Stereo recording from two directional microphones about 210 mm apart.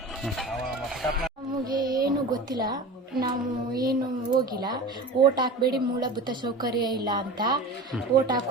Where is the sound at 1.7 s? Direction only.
20° right (ahead or behind).